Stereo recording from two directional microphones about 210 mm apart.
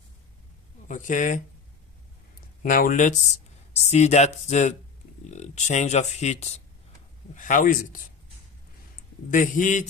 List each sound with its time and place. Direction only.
0.9 s speech: 35° left (ahead or behind)
2.6 s speech: 40° left (ahead or behind)
9.3 s speech: 40° left (ahead or behind)